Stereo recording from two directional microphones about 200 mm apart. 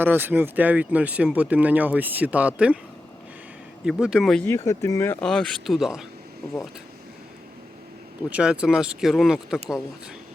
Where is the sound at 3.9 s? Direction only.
5° right (ahead or behind).